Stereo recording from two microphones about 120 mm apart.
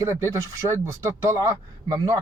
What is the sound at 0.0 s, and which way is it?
Speech, 25° right (ahead or behind).